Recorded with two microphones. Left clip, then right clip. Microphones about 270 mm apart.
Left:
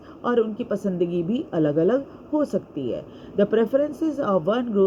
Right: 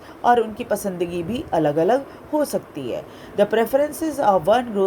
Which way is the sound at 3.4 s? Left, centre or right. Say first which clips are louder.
Right 2 dB; right.